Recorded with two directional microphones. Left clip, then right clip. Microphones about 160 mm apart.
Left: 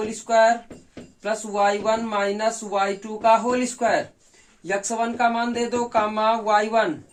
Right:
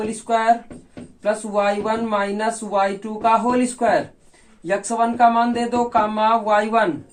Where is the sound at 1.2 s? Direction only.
20° left (ahead or behind).